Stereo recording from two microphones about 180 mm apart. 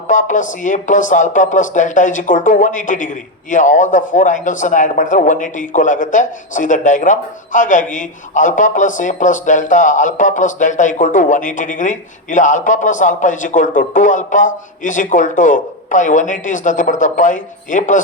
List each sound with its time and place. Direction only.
0.1 s speech: 45° left (ahead or behind)